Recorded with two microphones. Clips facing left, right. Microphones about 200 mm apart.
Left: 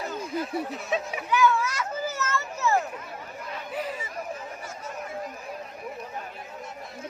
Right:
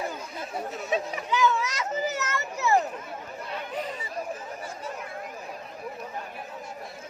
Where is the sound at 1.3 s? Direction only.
20° right (ahead or behind).